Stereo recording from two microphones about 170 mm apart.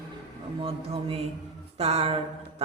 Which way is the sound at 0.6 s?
35° right (ahead or behind).